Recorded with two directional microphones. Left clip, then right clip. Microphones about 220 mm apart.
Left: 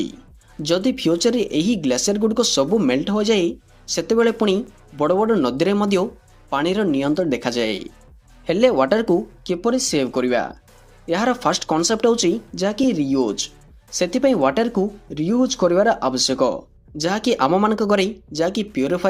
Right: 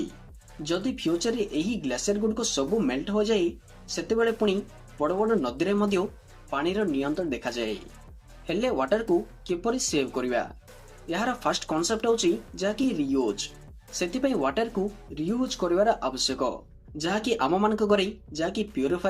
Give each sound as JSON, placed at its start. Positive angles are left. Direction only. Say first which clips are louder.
{"t": 0.6, "sound": "speech", "louder": "left 9 dB", "side_deg": 40}